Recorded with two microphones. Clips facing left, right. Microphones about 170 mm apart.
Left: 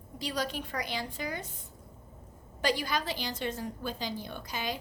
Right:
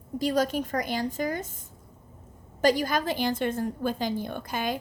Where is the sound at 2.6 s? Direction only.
45° right (ahead or behind).